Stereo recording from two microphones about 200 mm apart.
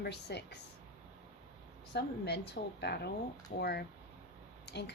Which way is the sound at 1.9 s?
55° left (ahead or behind).